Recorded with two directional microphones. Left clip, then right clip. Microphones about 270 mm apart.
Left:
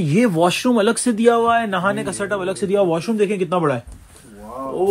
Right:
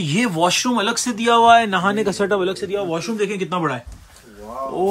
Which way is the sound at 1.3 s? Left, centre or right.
Centre.